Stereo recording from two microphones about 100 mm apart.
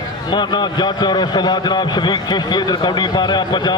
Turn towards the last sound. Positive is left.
turn(degrees=45)  # may be behind; listen again after turning